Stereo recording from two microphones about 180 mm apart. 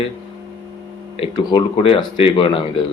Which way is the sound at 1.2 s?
30° left (ahead or behind).